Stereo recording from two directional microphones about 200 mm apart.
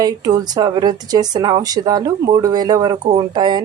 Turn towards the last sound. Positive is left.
turn(degrees=-20)  # may be behind; listen again after turning